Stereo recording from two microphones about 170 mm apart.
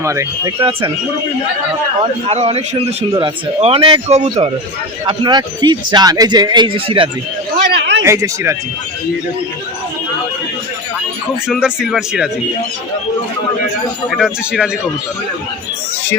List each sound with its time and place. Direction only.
0.0 s speech: 20° right (ahead or behind)
2.0 s speech: 40° right (ahead or behind)
4.1 s speech: 40° right (ahead or behind)
5.0 s speech: 25° right (ahead or behind)
7.7 s a sound: 80° right
8.0 s speech: 15° right (ahead or behind)
11.4 s speech: 5° right (ahead or behind)
14.1 s speech: centre (ahead or behind)